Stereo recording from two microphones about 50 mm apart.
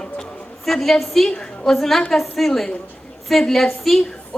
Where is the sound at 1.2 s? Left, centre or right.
Left.